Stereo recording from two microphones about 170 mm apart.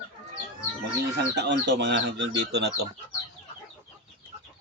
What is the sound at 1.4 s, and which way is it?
Speech, 90° right.